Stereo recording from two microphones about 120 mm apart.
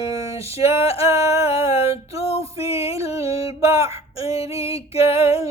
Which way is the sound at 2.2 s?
55° left (ahead or behind).